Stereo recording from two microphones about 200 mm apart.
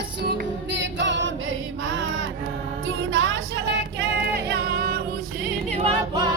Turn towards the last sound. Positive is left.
turn(degrees=-25)  # may be behind; listen again after turning